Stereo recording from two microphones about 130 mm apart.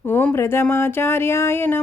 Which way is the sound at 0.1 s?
15° left (ahead or behind).